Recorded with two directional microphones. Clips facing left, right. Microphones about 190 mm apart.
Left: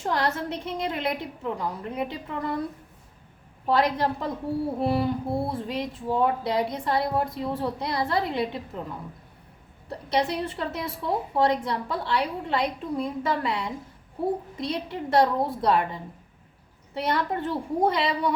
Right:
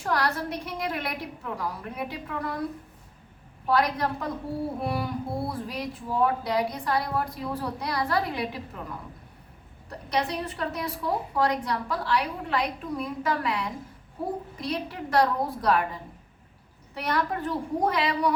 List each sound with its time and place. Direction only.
0.0 s speech: 25° left (ahead or behind)
3.7 s speech: 25° left (ahead or behind)
9.9 s speech: 30° left (ahead or behind)
16.9 s speech: 25° left (ahead or behind)